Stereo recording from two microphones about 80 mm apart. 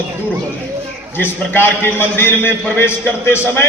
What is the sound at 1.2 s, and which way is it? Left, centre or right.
A man's voice, left.